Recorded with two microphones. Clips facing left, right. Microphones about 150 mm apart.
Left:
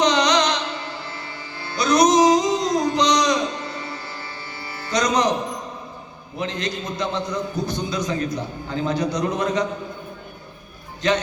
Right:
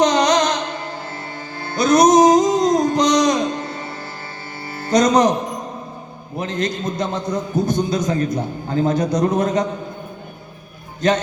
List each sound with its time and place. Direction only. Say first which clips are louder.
0.0 s music: right 3 dB; 50° right (ahead or behind)
6.3 s a man's voice: right 4 dB; 50° right (ahead or behind)
11.0 s a man's voice: right 3 dB; 50° right (ahead or behind)